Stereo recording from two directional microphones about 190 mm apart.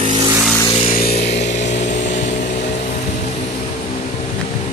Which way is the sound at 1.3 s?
35° left (ahead or behind).